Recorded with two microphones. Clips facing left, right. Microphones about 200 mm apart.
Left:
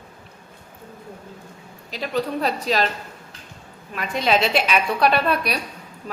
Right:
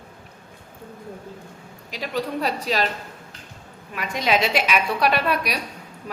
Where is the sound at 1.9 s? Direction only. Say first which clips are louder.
Left 2 dB; 10° right (ahead or behind).